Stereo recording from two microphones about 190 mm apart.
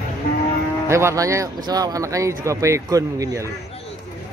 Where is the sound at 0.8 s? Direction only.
15° right (ahead or behind).